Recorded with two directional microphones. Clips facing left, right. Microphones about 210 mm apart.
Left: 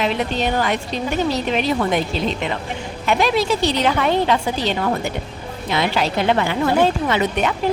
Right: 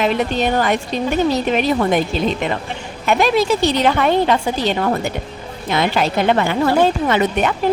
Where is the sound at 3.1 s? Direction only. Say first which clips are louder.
Right 3 dB; 50° right (ahead or behind).